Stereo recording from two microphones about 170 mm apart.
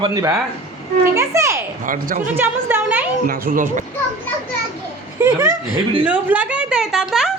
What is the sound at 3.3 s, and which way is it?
Speech, 55° right (ahead or behind).